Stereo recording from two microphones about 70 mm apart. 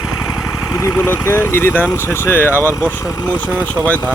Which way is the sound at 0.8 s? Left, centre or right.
Left.